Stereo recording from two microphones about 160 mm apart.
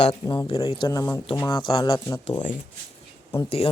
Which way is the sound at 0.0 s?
30° left (ahead or behind).